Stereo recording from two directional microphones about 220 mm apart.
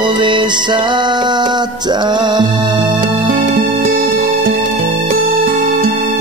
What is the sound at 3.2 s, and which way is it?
Music, 35° right (ahead or behind).